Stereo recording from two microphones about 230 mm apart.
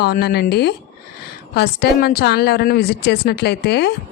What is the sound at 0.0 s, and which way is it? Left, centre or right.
A woman's voice, left.